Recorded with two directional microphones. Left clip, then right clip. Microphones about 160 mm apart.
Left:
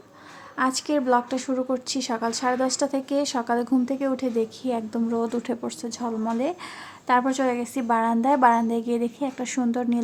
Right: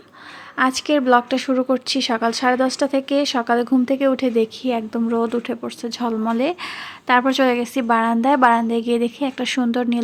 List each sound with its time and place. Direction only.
0.5 s speech: 15° right (ahead or behind)
5.4 s speech: centre (ahead or behind)
5.9 s speech: 15° right (ahead or behind)